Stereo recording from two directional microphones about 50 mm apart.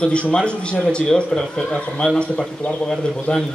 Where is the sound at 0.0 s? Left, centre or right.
Left.